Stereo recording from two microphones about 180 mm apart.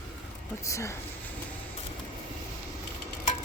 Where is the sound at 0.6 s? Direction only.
15° left (ahead or behind).